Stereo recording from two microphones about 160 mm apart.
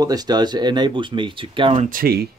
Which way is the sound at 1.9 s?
70° right (ahead or behind).